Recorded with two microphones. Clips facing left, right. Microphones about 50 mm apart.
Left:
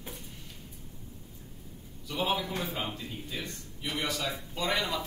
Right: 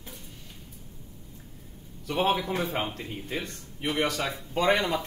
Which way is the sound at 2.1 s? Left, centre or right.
Right.